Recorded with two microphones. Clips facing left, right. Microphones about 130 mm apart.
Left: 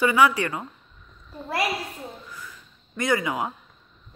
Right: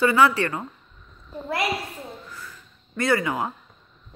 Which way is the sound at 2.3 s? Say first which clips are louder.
Even; 15° left (ahead or behind).